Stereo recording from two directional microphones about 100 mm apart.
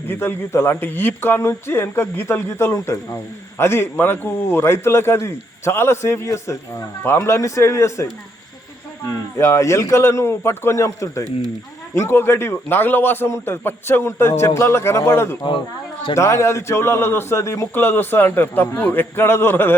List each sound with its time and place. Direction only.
0.1 s a man's voice: 25° left (ahead or behind)
9.0 s a man's voice: 30° left (ahead or behind)